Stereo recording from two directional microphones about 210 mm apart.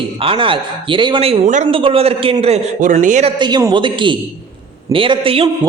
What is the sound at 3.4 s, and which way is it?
A man's voice, 20° right (ahead or behind).